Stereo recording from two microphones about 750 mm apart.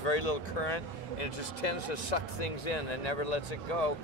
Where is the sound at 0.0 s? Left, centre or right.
Left.